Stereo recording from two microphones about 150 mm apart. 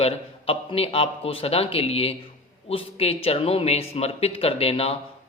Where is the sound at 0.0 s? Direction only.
40° left (ahead or behind).